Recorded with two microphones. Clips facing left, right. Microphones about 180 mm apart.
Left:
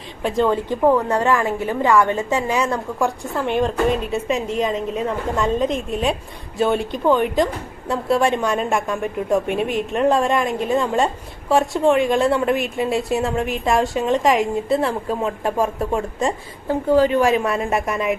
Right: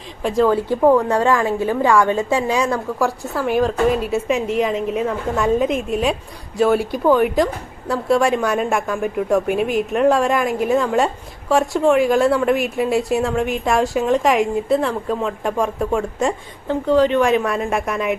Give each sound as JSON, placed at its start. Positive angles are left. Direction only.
{"t": 0.2, "sound": "a woman's voice", "side_deg": 0}